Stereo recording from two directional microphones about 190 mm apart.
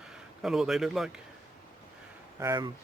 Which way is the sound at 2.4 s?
20° right (ahead or behind).